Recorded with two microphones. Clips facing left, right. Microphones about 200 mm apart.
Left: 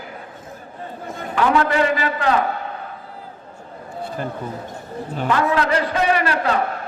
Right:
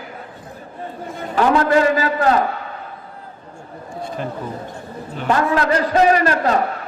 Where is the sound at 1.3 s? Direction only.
40° right (ahead or behind).